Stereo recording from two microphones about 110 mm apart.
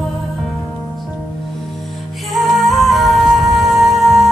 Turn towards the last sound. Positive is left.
turn(degrees=0)  # may be behind; listen again after turning